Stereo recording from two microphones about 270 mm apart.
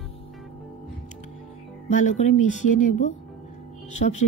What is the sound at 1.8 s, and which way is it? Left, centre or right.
Speech, left.